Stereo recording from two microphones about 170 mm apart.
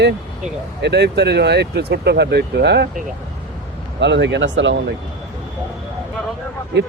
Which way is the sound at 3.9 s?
90° right.